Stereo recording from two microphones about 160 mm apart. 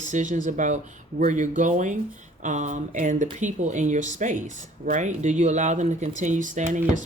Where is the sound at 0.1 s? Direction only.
50° right (ahead or behind).